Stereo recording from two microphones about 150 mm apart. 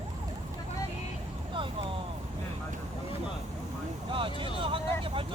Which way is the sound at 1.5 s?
35° right (ahead or behind).